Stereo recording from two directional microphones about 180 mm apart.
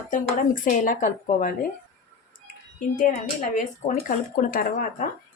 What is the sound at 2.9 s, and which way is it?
Speech, 45° left (ahead or behind).